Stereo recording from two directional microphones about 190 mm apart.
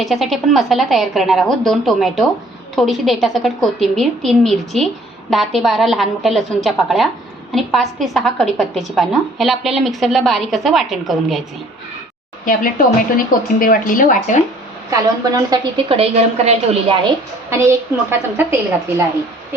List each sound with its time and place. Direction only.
0.0 s a woman's voice: centre (ahead or behind)
13.6 s speech: 45° left (ahead or behind)
14.8 s a woman's voice: 20° right (ahead or behind)
16.0 s a woman's voice: 35° right (ahead or behind)
17.5 s a woman's voice: 15° right (ahead or behind)